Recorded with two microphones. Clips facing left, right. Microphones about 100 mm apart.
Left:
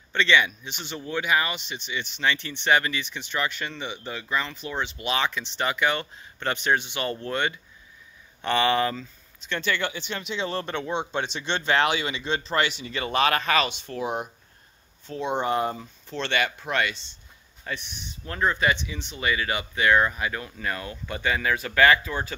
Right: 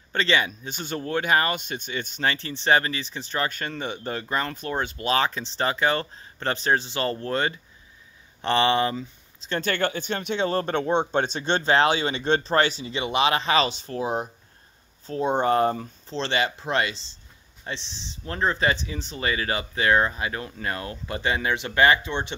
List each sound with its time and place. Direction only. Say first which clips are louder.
0.1 s speech: left 1 dB; 35° right (ahead or behind); by 9.0 s 20° right (ahead or behind)
9.5 s speech: right 2 dB; 45° right (ahead or behind)
12.8 s speech: right 1 dB; 20° right (ahead or behind); by 15.9 s 45° right (ahead or behind)
16.1 s speech: right 1 dB; 30° right (ahead or behind)